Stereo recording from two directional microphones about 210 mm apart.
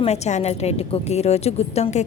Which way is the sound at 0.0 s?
30° left (ahead or behind).